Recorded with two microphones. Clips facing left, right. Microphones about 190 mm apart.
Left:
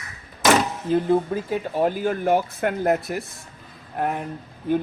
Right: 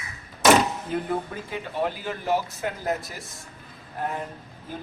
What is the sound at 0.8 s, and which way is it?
Speech, 30° left (ahead or behind).